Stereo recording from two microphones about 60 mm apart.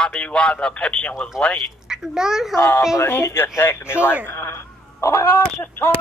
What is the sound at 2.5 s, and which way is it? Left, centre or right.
Speech, left.